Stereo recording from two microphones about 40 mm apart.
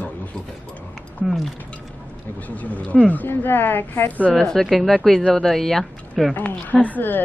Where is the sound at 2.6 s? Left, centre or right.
Left.